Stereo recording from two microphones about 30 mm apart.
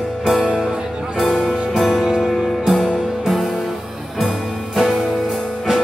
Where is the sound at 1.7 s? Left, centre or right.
Centre.